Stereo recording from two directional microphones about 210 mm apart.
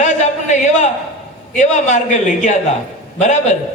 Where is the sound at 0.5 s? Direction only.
35° left (ahead or behind).